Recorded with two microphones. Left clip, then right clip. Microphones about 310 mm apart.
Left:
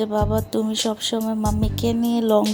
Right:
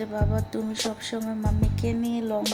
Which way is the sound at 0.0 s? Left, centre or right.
Centre.